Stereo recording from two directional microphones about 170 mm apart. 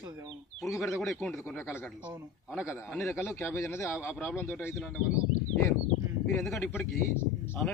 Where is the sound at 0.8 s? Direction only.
Centre (ahead or behind).